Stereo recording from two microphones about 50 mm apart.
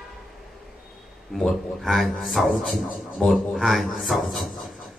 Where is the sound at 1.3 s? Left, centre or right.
Centre.